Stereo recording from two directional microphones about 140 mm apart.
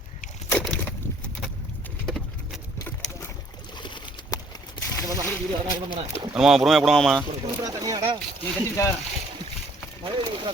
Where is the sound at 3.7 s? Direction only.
35° left (ahead or behind).